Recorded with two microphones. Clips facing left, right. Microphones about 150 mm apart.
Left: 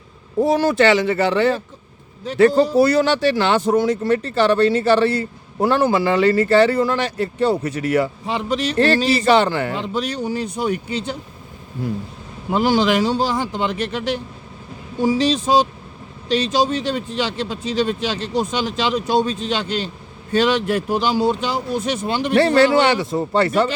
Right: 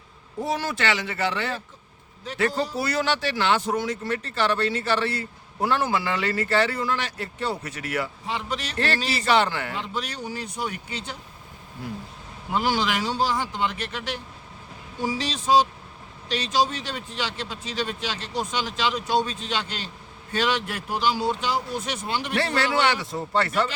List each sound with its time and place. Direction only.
0.4 s speech: 35° left (ahead or behind)
12.5 s speech: 25° left (ahead or behind)